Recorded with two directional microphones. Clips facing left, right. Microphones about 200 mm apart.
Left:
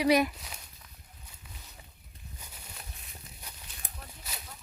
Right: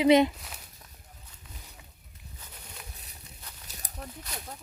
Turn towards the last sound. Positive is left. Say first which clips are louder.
# right 5 dB
turn(degrees=-40)  # may be behind; listen again after turning